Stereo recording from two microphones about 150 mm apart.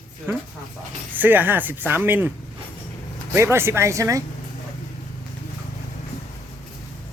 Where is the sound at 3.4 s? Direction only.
15° right (ahead or behind).